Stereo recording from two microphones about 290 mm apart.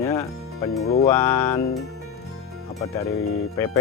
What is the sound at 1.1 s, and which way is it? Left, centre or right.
Speech, centre.